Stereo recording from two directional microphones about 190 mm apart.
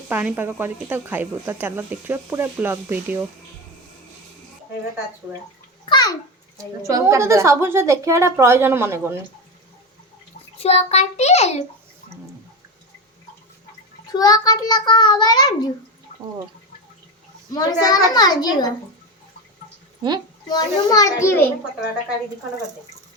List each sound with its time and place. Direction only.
0.1 s speech: 10° right (ahead or behind)
5.8 s bathtub: 25° left (ahead or behind)
6.8 s speech: 15° right (ahead or behind)
10.6 s a child's voice: 35° left (ahead or behind)
14.1 s a child's voice: 20° left (ahead or behind)
17.5 s a child's voice: 20° left (ahead or behind)
20.5 s a child's voice: 20° left (ahead or behind)